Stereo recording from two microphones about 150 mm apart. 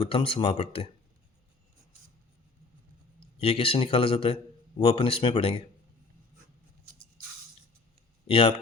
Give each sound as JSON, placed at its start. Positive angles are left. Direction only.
{"t": 0.0, "sound": "speech", "side_deg": 40}
{"t": 3.2, "sound": "a man's voice", "side_deg": 40}
{"t": 8.3, "sound": "speech", "side_deg": 40}